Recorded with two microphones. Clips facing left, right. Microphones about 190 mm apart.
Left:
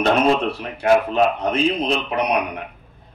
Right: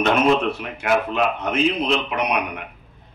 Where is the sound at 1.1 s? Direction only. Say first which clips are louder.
Left 3 dB; 35° left (ahead or behind).